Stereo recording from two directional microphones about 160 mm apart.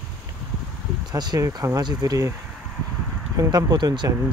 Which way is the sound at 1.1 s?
25° right (ahead or behind).